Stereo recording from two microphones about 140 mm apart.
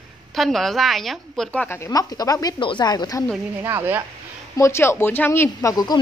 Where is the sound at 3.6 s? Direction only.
15° right (ahead or behind).